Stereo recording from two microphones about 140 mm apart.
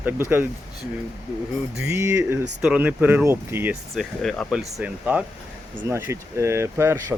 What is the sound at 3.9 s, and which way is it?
Speech, centre (ahead or behind).